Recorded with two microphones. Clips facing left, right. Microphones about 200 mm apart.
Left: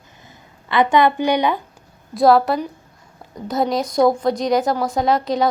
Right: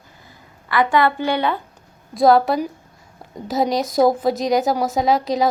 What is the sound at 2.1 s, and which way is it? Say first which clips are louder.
A woman's voice: even; centre (ahead or behind).